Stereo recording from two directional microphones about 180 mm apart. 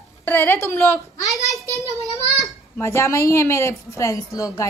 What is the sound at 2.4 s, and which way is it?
A woman's voice, 15° left (ahead or behind).